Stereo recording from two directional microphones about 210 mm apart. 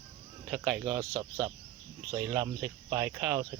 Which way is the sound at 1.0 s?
15° right (ahead or behind).